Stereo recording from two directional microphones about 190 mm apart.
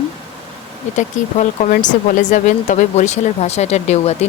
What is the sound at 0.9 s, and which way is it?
Speech, 40° left (ahead or behind).